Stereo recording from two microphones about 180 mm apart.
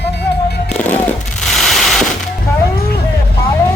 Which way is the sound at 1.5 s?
Centre (ahead or behind).